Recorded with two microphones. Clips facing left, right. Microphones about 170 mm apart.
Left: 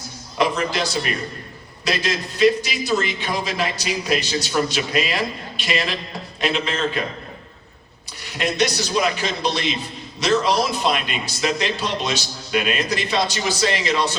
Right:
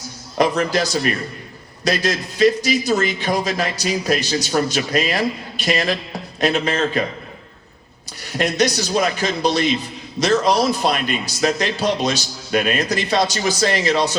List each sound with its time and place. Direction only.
0.3 s a man's voice: 40° right (ahead or behind)
8.2 s a man's voice: 40° right (ahead or behind)